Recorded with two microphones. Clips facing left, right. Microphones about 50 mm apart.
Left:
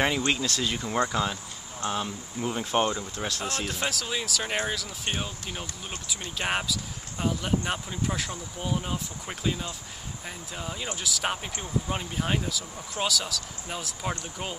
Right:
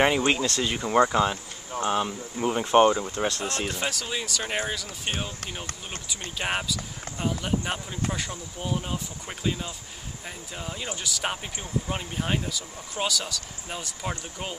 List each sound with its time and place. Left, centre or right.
0.0 s speech: centre
3.4 s speech: centre